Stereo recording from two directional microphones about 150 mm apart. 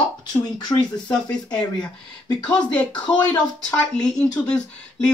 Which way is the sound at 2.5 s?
5° left (ahead or behind).